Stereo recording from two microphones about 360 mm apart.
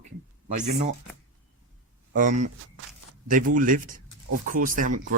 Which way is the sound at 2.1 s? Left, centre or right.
Right.